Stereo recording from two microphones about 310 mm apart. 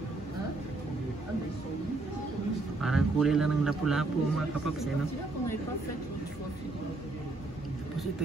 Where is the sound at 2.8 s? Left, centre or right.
Centre.